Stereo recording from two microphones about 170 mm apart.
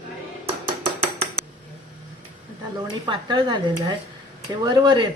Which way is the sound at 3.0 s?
25° right (ahead or behind).